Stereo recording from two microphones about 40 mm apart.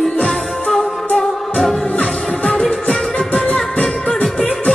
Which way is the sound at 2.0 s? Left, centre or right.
Centre.